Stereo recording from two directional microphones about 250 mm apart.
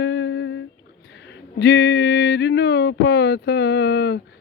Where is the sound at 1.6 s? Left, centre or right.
Left.